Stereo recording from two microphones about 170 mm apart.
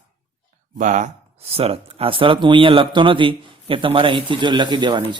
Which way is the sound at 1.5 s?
35° right (ahead or behind).